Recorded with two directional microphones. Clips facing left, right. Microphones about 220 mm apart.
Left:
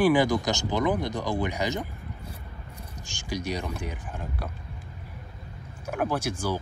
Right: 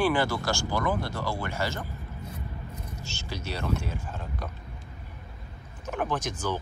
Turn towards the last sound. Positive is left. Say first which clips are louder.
# left 2 dB
turn(degrees=10)  # may be behind; listen again after turning